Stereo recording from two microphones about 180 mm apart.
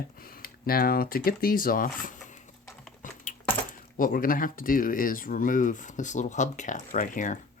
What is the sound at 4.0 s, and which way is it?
Speech, 50° left (ahead or behind).